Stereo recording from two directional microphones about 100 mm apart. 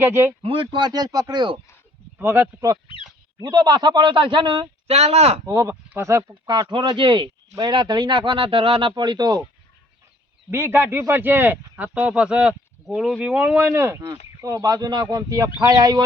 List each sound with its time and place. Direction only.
0.0 s a man's voice: 20° right (ahead or behind)
0.4 s a man's voice: 60° right (ahead or behind)
2.1 s a man's voice: 25° right (ahead or behind)
3.3 s a man's voice: 45° right (ahead or behind)
4.9 s speech: 90° right
5.5 s speech: 35° right (ahead or behind)
6.5 s a man's voice: 50° right (ahead or behind)
9.0 s a man's voice: 45° right (ahead or behind)
10.5 s a man's voice: 20° right (ahead or behind)
14.4 s speech: 35° right (ahead or behind)